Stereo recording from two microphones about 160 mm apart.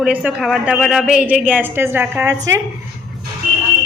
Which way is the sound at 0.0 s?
10° right (ahead or behind).